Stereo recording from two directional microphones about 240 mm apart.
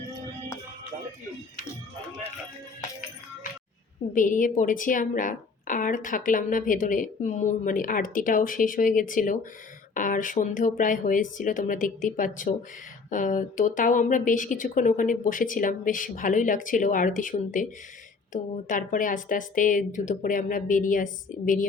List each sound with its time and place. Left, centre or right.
4.1 s a woman's voice: left